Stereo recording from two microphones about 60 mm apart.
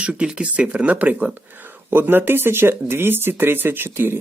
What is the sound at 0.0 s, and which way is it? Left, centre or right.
Speech, centre.